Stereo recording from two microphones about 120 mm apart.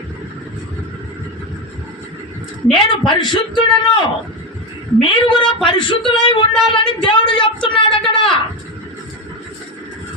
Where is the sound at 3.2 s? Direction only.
40° left (ahead or behind).